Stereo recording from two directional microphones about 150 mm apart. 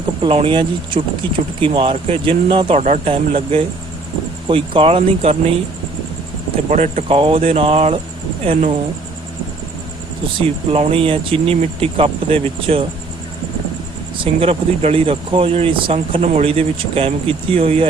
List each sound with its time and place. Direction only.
0.2 s speech: 35° right (ahead or behind)
6.7 s speech: 50° right (ahead or behind)
7.2 s speech: 40° right (ahead or behind)
10.7 s speech: 40° right (ahead or behind)
14.2 s speech: 40° right (ahead or behind)